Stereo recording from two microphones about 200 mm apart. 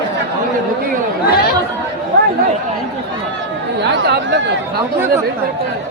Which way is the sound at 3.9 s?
60° right (ahead or behind).